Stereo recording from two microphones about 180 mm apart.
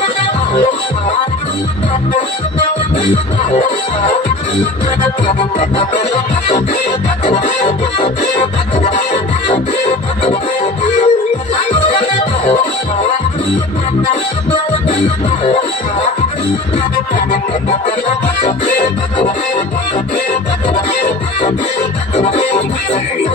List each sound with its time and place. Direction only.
7.2 s music: 40° left (ahead or behind)
8.8 s music: 40° left (ahead or behind)
22.1 s music: 35° left (ahead or behind)